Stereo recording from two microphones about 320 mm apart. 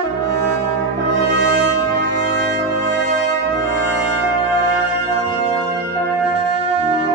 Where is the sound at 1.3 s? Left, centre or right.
Right.